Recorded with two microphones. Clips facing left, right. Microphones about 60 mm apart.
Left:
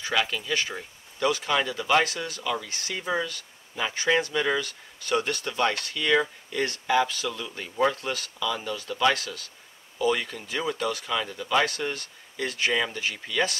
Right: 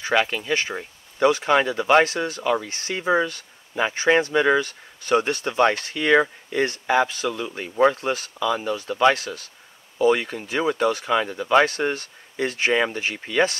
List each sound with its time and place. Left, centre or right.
0.0 s speech: right